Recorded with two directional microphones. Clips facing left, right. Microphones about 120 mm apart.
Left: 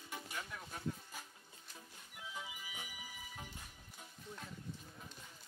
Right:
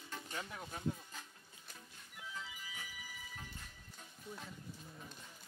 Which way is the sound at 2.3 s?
15° left (ahead or behind).